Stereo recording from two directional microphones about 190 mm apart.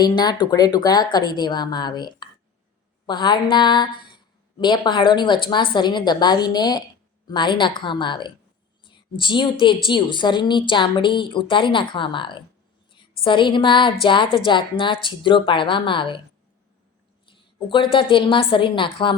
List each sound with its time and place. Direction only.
0.0 s a woman's voice: 20° left (ahead or behind)
17.2 s a woman's voice: 25° left (ahead or behind)